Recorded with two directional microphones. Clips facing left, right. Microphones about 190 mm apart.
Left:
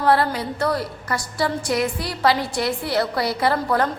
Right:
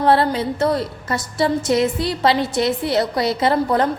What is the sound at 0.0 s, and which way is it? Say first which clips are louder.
A woman's voice: right 3 dB; 25° right (ahead or behind).